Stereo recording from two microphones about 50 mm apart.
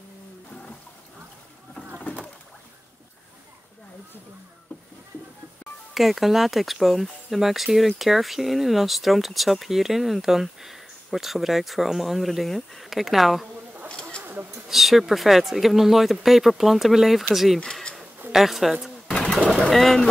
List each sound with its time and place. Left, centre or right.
5.9 s speech: centre
14.2 s a sound: right
14.7 s speech: centre
19.3 s bird: centre
19.7 s speech: centre